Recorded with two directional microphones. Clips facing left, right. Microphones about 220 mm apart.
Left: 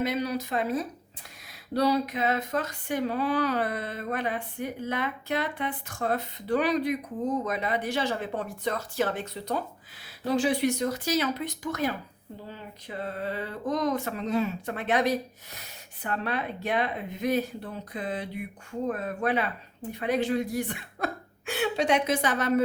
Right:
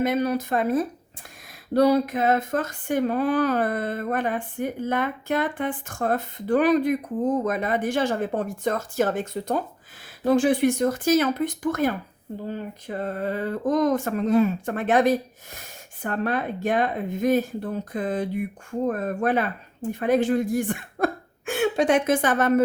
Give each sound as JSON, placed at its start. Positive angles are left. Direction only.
{"t": 0.0, "sound": "speech", "side_deg": -50}